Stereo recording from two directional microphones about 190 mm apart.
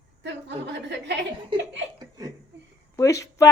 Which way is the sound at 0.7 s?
65° right (ahead or behind).